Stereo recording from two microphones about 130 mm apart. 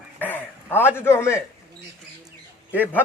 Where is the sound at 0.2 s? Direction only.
15° left (ahead or behind).